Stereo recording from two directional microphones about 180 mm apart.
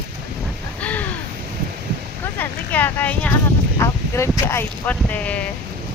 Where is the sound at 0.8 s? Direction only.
10° left (ahead or behind).